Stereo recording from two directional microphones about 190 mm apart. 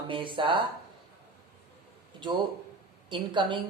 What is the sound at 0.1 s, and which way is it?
Speech, 25° right (ahead or behind).